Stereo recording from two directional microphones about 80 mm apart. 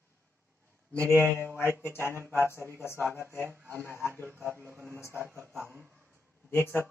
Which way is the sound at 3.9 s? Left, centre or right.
Right.